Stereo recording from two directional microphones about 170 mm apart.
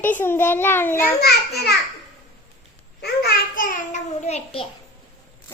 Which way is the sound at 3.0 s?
60° left (ahead or behind).